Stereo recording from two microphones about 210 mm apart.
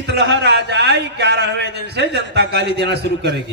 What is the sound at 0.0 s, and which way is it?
A man's voice, 50° right (ahead or behind).